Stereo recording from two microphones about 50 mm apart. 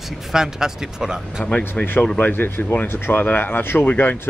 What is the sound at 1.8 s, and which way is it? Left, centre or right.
Speech, left.